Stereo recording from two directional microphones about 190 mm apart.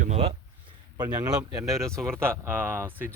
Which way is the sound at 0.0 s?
35° right (ahead or behind).